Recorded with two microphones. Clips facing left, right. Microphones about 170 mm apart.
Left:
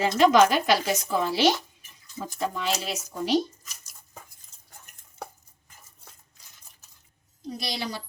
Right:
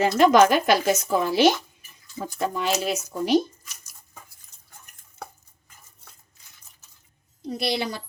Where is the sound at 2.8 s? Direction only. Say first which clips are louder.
Right 4 dB; 50° right (ahead or behind).